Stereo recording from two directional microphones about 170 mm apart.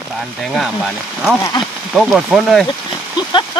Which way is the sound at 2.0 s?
Centre (ahead or behind).